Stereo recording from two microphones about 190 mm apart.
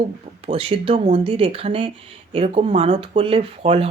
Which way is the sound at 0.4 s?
30° right (ahead or behind).